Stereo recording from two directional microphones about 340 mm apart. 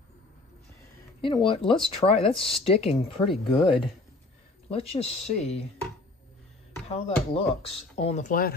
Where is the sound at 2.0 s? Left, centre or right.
Centre.